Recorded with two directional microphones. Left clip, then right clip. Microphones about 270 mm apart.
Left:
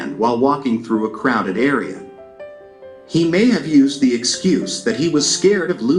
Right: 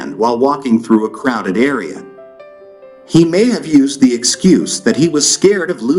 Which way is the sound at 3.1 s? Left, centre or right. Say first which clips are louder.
Right 5 dB; right.